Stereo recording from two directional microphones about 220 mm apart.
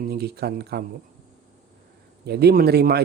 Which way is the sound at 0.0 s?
45° right (ahead or behind).